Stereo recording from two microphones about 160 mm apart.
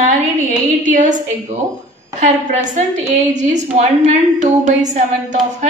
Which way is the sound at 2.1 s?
50° right (ahead or behind).